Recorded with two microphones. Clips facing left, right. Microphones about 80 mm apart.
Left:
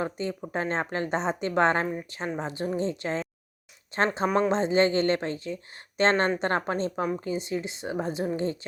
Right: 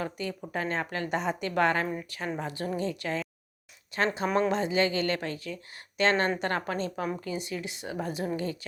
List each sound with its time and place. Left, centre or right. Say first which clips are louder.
0.0 s a woman's voice: left 3 dB; left